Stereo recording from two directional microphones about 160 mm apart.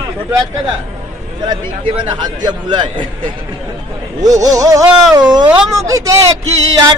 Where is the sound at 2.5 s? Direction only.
30° right (ahead or behind).